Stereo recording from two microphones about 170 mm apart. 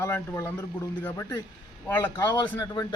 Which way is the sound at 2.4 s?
10° left (ahead or behind).